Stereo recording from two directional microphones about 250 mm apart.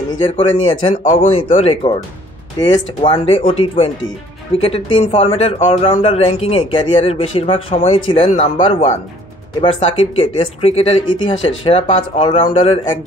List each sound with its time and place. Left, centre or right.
0.2 s speech: centre